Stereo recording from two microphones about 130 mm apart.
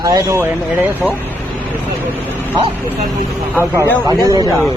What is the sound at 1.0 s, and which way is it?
Speech, centre (ahead or behind).